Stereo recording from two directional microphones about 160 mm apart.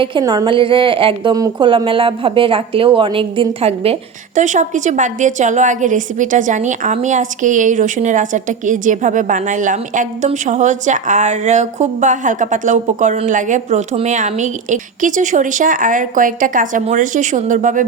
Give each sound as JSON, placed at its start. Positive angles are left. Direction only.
{"t": 0.0, "sound": "a woman's voice", "side_deg": -30}
{"t": 4.4, "sound": "a woman's voice", "side_deg": -50}